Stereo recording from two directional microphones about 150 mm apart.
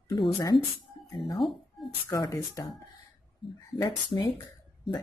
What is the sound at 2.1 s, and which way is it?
Speech, 20° left (ahead or behind).